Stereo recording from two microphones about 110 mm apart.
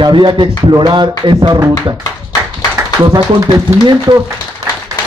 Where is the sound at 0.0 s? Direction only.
40° right (ahead or behind).